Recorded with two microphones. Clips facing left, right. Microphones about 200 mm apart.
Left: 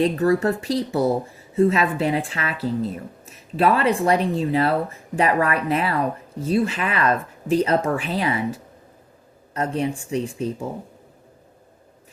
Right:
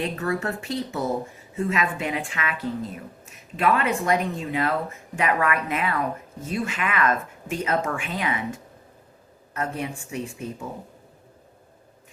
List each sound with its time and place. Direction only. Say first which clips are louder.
0.0 s speech: left 8 dB; 35° left (ahead or behind)